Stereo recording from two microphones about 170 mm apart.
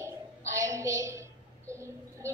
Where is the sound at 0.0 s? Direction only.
15° right (ahead or behind).